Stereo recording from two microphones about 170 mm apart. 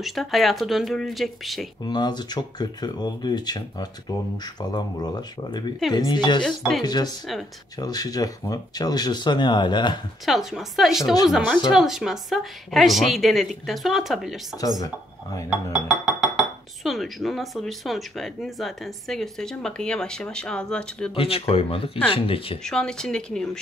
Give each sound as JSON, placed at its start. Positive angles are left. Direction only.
{"t": 0.0, "sound": "speech", "side_deg": 0}
{"t": 1.9, "sound": "speech", "side_deg": 25}
{"t": 10.2, "sound": "speech", "side_deg": 0}
{"t": 15.7, "sound": "speech", "side_deg": -5}
{"t": 21.1, "sound": "speech", "side_deg": 35}
{"t": 22.6, "sound": "speech", "side_deg": 5}